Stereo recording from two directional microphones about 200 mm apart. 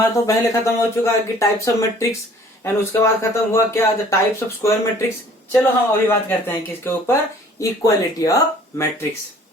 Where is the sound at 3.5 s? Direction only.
15° left (ahead or behind).